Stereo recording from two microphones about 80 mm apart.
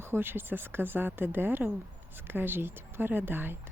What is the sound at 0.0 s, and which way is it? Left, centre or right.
Speech, right.